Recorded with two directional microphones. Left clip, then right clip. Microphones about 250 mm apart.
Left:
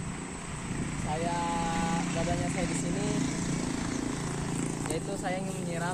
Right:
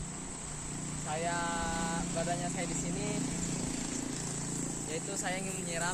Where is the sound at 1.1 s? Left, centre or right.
Right.